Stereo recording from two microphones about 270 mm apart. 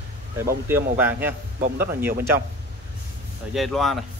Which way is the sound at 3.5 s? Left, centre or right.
Centre.